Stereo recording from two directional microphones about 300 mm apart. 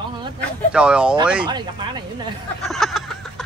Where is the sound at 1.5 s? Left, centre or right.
Centre.